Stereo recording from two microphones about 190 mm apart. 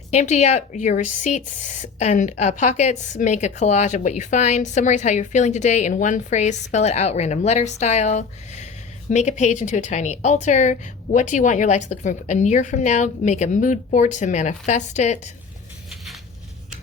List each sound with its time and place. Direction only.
0.1 s a woman's voice: 35° left (ahead or behind)